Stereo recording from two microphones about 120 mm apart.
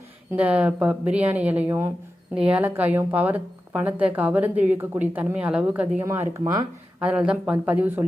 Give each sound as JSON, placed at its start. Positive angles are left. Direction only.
{"t": 0.3, "sound": "a woman's voice", "side_deg": -10}
{"t": 6.0, "sound": "speech", "side_deg": -25}
{"t": 7.0, "sound": "a woman's voice", "side_deg": -10}